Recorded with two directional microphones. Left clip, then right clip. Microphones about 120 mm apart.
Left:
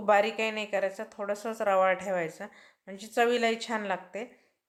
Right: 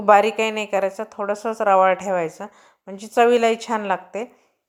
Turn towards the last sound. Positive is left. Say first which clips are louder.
# right 9 dB
turn(degrees=-40)  # may be behind; listen again after turning